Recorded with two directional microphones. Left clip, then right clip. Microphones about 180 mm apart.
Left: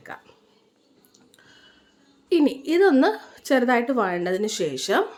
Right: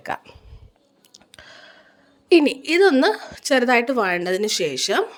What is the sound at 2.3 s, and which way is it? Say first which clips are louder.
A woman's voice: right 5 dB; 45° right (ahead or behind).